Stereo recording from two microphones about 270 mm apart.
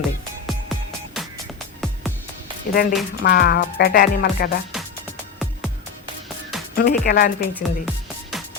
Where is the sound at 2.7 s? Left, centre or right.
Left.